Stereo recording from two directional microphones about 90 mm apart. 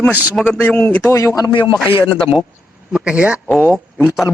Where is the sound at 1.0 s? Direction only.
35° left (ahead or behind).